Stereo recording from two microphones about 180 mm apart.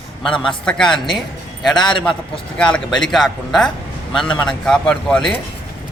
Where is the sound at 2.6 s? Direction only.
5° left (ahead or behind).